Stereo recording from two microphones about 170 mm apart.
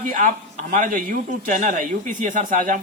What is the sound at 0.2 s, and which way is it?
A man's voice, 45° right (ahead or behind).